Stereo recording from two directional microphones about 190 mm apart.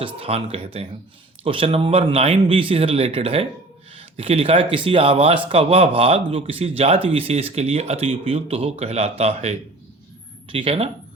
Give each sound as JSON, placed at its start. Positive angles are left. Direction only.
{"t": 0.2, "sound": "speech", "side_deg": -30}